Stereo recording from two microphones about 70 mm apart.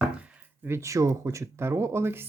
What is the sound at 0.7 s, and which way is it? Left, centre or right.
Speech, right.